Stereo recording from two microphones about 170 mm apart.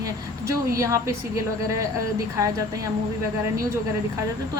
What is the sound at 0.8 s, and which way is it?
A woman's voice, 20° right (ahead or behind).